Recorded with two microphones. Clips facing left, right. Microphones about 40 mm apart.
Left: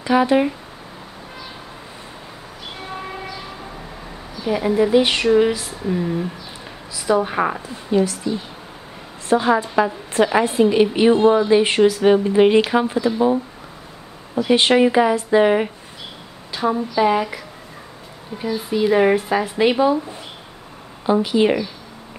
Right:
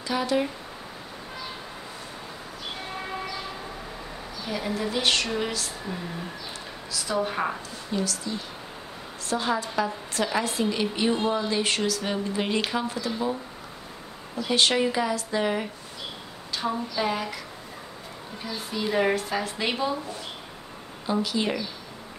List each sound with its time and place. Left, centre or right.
0.0 s speech: left
4.5 s a woman's voice: centre
9.3 s a woman's voice: left
14.4 s speech: left
16.5 s a woman's voice: centre
18.4 s a woman's voice: centre
21.0 s a woman's voice: left